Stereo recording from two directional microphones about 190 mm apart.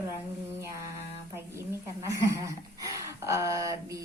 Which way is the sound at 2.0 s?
15° right (ahead or behind).